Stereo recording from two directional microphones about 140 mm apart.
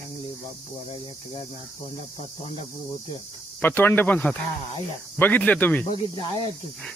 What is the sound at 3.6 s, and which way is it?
Speech, 15° left (ahead or behind).